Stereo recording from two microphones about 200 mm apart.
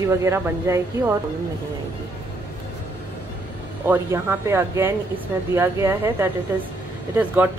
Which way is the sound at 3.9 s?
10° right (ahead or behind).